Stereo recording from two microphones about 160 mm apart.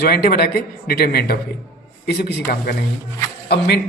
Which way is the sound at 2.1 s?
90° left.